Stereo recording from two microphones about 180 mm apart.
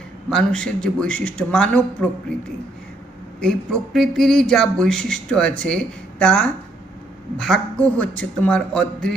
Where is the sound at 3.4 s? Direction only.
5° left (ahead or behind).